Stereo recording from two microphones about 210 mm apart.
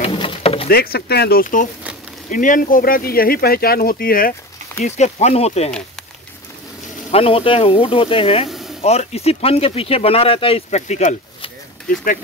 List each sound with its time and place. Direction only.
0.0 s pigeon: 25° left (ahead or behind)
0.7 s speech: 45° left (ahead or behind)
4.8 s speech: 35° left (ahead or behind)
7.1 s speech: 25° left (ahead or behind)
8.5 s a sound: centre (ahead or behind)
8.8 s speech: 30° left (ahead or behind)